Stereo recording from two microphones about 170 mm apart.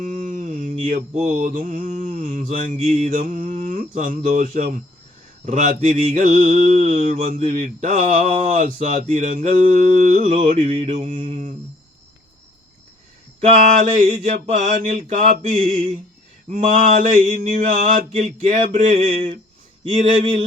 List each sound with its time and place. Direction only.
0.0 s mantra: 50° right (ahead or behind)
13.4 s mantra: 45° right (ahead or behind)